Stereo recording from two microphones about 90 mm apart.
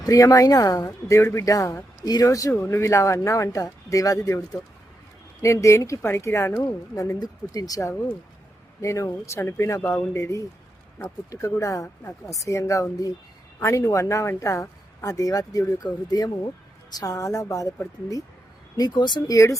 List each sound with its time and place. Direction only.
0.0 s speech: 40° left (ahead or behind)
18.8 s speech: 55° left (ahead or behind)
19.3 s speech: 35° left (ahead or behind)